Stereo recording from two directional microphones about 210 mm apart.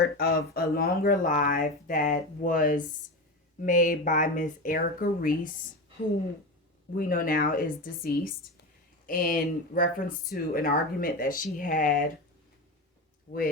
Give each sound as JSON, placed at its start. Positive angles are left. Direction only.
{"t": 0.0, "sound": "speech", "side_deg": 50}
{"t": 6.9, "sound": "speech", "side_deg": 40}